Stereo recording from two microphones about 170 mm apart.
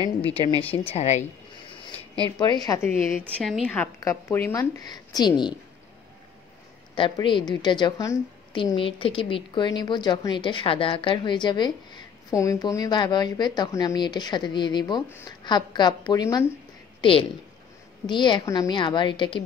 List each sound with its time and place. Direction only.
0.8 s speech: 40° left (ahead or behind)
2.3 s a woman's voice: 25° left (ahead or behind)
2.9 s a woman's voice: 5° left (ahead or behind); by 5.6 s 25° left (ahead or behind)
7.0 s a woman's voice: 30° left (ahead or behind)